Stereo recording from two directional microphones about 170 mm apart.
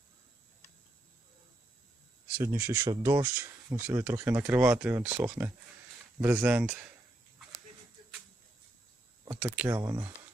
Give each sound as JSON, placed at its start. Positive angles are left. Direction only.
{"t": 2.4, "sound": "speech", "side_deg": -15}
{"t": 9.4, "sound": "speech", "side_deg": -15}